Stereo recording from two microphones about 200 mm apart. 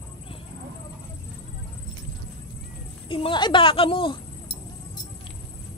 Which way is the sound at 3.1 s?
25° left (ahead or behind).